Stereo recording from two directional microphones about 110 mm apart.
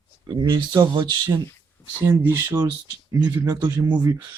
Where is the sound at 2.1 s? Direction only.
25° right (ahead or behind).